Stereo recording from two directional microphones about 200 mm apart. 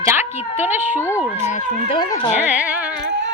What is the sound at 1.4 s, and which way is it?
Speech, 35° left (ahead or behind).